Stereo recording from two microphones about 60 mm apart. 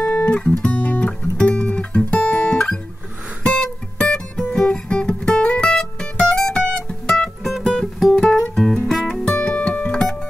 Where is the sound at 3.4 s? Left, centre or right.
Centre.